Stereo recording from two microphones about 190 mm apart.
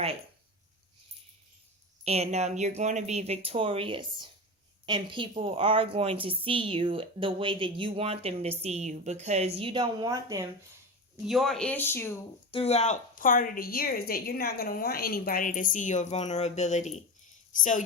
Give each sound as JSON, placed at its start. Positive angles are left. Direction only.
{"t": 2.0, "sound": "a woman's voice", "side_deg": -35}
{"t": 11.3, "sound": "speech", "side_deg": 0}
{"t": 12.5, "sound": "a woman's voice", "side_deg": 30}